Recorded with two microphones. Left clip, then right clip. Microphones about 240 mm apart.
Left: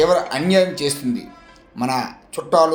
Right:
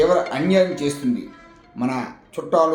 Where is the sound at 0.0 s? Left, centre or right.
Left.